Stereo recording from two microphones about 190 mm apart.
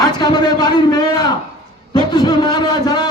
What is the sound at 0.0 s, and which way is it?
A man's voice, 20° left (ahead or behind).